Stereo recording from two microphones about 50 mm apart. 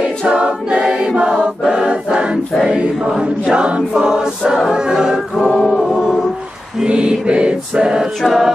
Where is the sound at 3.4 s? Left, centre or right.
Right.